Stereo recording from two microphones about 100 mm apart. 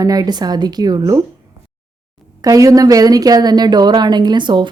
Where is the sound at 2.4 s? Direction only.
35° right (ahead or behind); by 4.7 s 50° right (ahead or behind).